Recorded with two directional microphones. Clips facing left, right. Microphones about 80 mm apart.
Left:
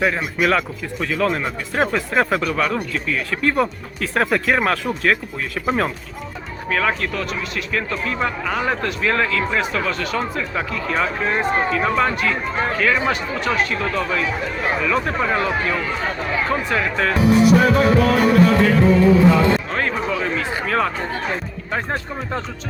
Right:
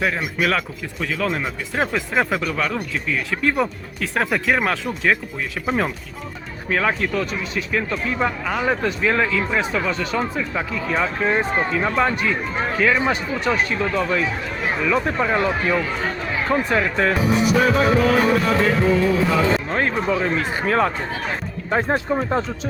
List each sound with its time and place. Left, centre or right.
0.0 s speech: centre
6.7 s speech: centre
12.2 s speech: centre
16.5 s speech: centre
17.2 s speech: centre
20.1 s speech: right
21.7 s speech: centre